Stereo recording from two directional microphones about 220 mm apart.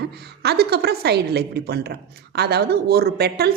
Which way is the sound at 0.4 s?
45° right (ahead or behind).